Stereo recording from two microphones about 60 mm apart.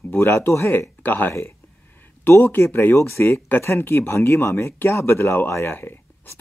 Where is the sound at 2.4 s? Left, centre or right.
Left.